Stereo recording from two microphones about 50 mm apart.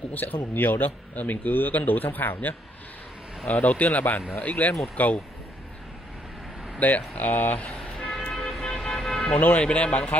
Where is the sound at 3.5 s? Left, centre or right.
Left.